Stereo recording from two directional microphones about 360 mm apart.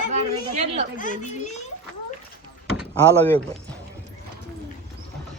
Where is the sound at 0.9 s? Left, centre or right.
Left.